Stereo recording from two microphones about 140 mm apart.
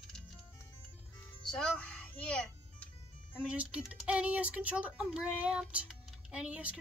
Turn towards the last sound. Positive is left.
turn(degrees=-10)  # may be behind; listen again after turning